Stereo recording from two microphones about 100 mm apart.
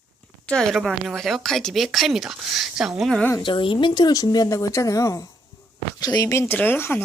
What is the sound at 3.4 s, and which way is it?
Speech, 55° left (ahead or behind).